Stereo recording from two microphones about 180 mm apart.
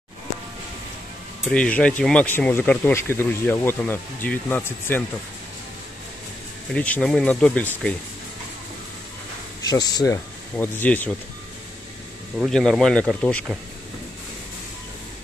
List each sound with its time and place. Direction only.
1.5 s speech: 5° left (ahead or behind)
6.7 s speech: 5° left (ahead or behind)
9.6 s speech: 20° left (ahead or behind)
12.4 s speech: 5° left (ahead or behind)